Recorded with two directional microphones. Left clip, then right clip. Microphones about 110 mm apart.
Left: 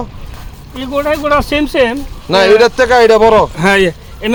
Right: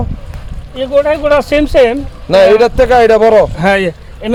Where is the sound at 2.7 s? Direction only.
40° right (ahead or behind).